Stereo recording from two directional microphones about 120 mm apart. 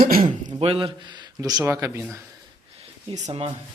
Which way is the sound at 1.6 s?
20° right (ahead or behind).